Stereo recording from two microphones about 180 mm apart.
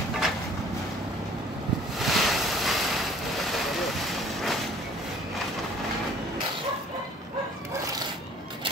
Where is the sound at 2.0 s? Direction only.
Centre (ahead or behind).